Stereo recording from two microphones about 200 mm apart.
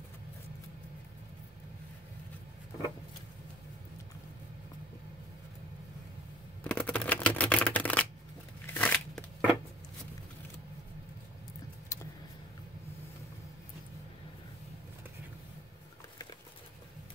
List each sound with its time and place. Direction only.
6.6 s shuffling cards: 5° left (ahead or behind)
8.7 s a sound: 5° left (ahead or behind)
11.9 s vehicle: 15° left (ahead or behind)